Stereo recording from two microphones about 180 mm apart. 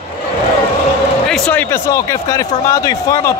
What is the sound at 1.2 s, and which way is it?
Speech, 5° left (ahead or behind).